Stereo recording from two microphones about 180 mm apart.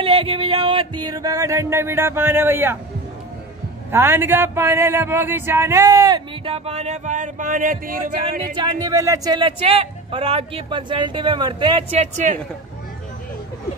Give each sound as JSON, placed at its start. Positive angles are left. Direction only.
{"t": 0.0, "sound": "a man's voice", "side_deg": -30}
{"t": 3.9, "sound": "a man's voice", "side_deg": -10}
{"t": 8.5, "sound": "speech", "side_deg": -20}